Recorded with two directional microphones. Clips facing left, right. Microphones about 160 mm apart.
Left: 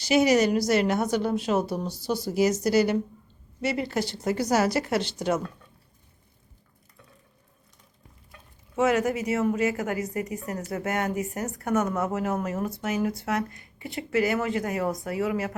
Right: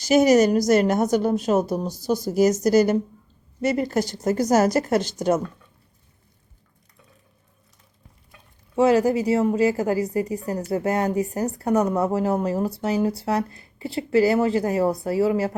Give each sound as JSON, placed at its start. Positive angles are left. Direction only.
{"t": 0.0, "sound": "a woman's voice", "side_deg": -45}
{"t": 8.7, "sound": "speech", "side_deg": -30}